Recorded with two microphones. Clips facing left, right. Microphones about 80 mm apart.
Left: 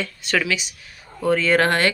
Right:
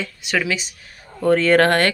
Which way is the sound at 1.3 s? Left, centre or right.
Right.